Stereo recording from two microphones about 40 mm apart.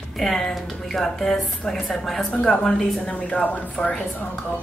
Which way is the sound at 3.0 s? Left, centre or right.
Left.